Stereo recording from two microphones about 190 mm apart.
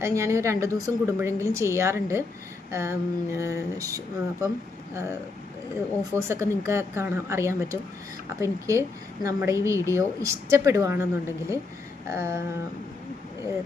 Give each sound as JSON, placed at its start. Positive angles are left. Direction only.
{"t": 0.0, "sound": "a woman's voice", "side_deg": -15}
{"t": 6.1, "sound": "a woman's voice", "side_deg": -15}